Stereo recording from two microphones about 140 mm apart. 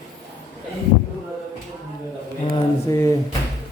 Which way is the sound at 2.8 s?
20° left (ahead or behind).